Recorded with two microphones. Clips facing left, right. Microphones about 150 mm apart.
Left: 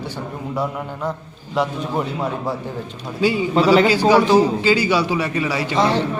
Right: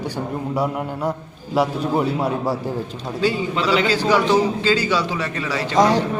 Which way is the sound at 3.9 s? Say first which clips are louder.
Left 3 dB; 10° left (ahead or behind).